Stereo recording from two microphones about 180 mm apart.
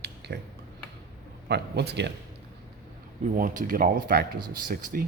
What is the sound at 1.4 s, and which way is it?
Speech, 70° right (ahead or behind).